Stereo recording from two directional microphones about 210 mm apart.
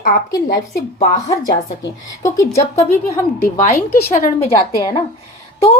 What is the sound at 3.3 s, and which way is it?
Speech, 40° left (ahead or behind).